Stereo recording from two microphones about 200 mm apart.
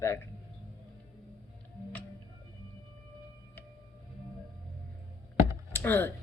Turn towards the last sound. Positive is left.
turn(degrees=10)  # may be behind; listen again after turning